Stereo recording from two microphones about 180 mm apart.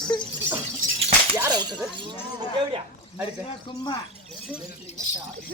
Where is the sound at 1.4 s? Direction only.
20° right (ahead or behind).